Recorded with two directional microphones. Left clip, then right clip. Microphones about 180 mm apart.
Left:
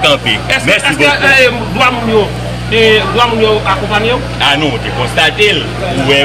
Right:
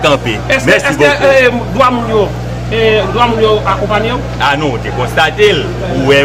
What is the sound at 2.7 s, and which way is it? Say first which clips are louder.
Speech: left 2 dB; 55° right (ahead or behind).